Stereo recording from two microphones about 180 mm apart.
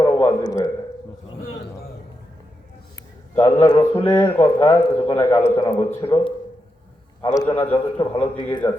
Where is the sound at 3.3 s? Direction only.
20° left (ahead or behind).